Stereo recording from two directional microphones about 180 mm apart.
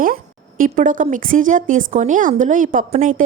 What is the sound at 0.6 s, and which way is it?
A woman's voice, 45° right (ahead or behind).